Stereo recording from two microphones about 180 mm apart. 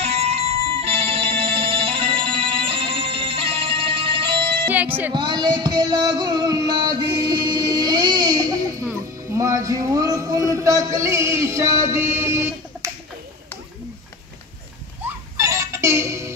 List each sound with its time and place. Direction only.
0.0 s music: 35° right (ahead or behind)
4.6 s speech: 10° right (ahead or behind)
5.1 s music: 25° right (ahead or behind)
7.2 s a sound: 25° right (ahead or behind)
9.3 s speech: 20° right (ahead or behind)
15.3 s music: 15° right (ahead or behind)